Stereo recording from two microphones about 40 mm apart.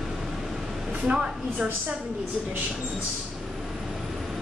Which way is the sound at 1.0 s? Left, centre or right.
Right.